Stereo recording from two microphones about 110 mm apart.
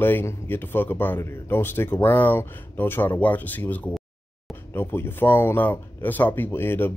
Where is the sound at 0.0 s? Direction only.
20° left (ahead or behind).